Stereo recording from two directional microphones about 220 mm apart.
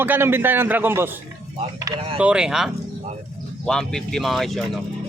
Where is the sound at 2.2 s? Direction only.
5° right (ahead or behind).